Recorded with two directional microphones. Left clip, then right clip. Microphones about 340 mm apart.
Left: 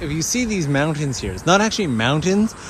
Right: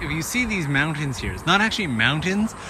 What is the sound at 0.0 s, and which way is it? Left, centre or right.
Speech, centre.